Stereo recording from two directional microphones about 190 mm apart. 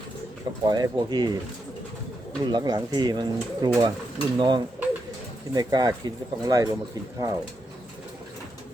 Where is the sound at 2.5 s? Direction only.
20° right (ahead or behind).